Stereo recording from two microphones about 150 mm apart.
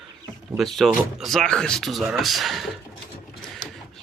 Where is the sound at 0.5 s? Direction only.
Centre (ahead or behind).